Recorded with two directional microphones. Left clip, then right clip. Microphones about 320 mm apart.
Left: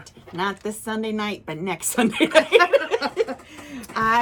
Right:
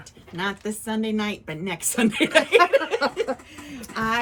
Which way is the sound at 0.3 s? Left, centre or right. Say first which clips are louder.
Left 2 dB; centre.